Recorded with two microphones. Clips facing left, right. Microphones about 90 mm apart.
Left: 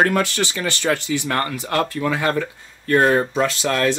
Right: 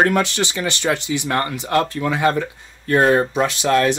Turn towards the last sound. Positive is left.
turn(degrees=-20)  # may be behind; listen again after turning